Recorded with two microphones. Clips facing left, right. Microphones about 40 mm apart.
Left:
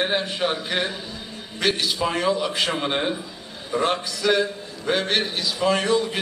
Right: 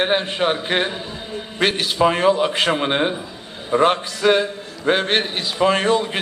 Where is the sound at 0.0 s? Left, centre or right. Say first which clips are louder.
Right 4 dB; right.